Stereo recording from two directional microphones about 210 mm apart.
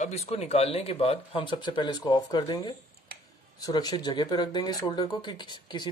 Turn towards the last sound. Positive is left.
turn(degrees=20)  # may be behind; listen again after turning